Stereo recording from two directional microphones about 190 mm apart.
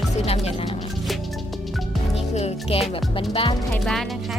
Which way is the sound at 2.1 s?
35° left (ahead or behind).